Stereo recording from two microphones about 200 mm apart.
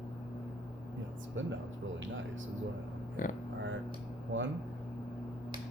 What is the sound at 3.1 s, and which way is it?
Speech, 40° left (ahead or behind).